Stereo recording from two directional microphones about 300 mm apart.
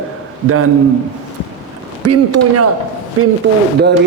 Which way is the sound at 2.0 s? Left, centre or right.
Right.